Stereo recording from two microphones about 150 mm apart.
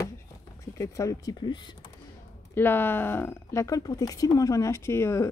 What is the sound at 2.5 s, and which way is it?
Speech, 15° left (ahead or behind).